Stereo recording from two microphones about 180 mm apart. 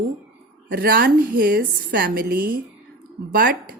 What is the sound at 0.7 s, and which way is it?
A woman's voice, 60° right (ahead or behind).